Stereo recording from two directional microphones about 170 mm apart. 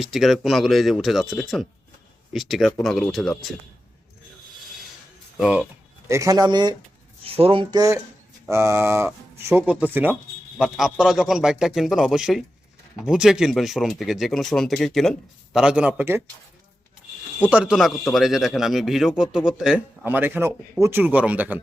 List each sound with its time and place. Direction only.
0.0 s speech: centre (ahead or behind)
5.4 s speech: 5° right (ahead or behind)
6.1 s speech: 20° right (ahead or behind)
7.3 s speech: 35° right (ahead or behind); by 16.3 s 15° right (ahead or behind)
17.4 s speech: 5° right (ahead or behind)